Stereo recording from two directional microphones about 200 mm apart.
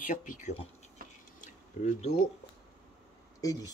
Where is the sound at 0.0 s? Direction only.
40° left (ahead or behind).